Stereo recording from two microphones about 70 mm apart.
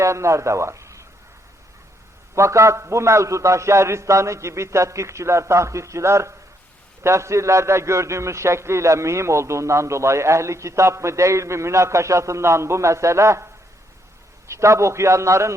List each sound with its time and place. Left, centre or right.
0.0 s speech: right
2.3 s a man's voice: right